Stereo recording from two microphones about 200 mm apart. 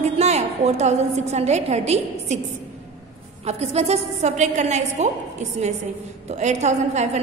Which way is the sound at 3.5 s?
35° right (ahead or behind).